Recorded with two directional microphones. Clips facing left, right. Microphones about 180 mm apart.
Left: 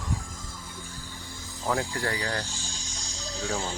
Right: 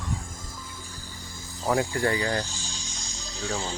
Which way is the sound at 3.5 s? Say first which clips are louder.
Right 1 dB; 10° left (ahead or behind).